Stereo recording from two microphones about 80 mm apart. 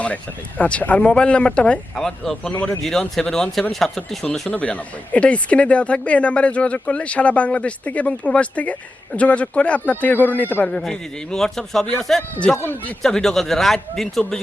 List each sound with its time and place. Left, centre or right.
0.6 s speech: centre
4.4 s speech: centre